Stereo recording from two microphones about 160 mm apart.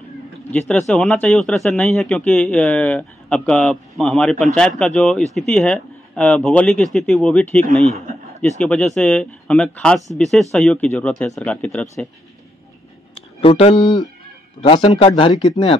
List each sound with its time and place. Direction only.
0.5 s speech: 5° left (ahead or behind)
13.1 s speech: 35° left (ahead or behind)